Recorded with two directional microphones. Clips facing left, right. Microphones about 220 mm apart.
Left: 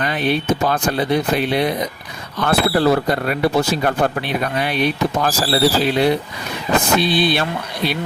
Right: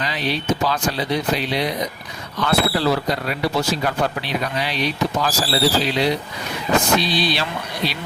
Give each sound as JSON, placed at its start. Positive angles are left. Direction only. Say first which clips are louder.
{"t": 0.0, "sound": "speech", "louder": "left 5 dB", "side_deg": 55}